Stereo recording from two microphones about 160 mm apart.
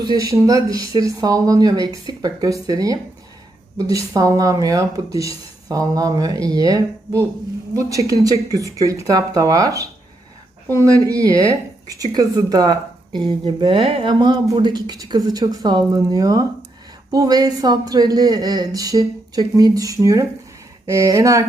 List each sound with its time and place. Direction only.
0.0 s speech: 25° right (ahead or behind)